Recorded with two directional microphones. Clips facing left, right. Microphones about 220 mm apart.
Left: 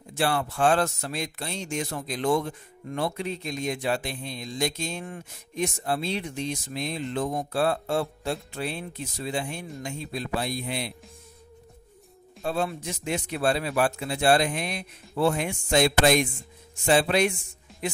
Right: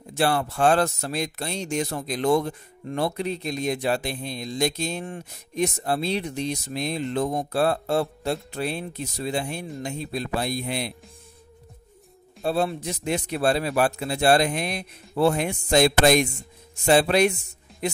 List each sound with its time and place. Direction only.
0.2 s speech: 40° right (ahead or behind)
12.4 s speech: 35° right (ahead or behind)